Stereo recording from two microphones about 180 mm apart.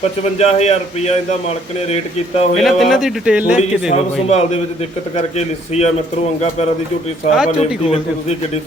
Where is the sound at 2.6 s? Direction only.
Centre (ahead or behind).